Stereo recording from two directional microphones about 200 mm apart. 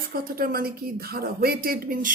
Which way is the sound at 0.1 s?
45° right (ahead or behind).